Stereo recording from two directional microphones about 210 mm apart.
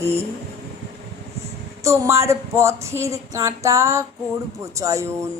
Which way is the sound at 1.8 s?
15° right (ahead or behind).